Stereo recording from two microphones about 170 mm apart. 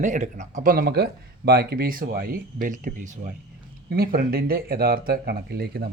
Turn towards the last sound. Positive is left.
turn(degrees=-65)  # may be behind; listen again after turning